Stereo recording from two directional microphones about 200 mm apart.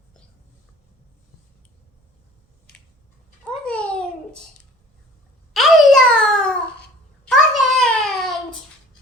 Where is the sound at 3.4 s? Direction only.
5° left (ahead or behind).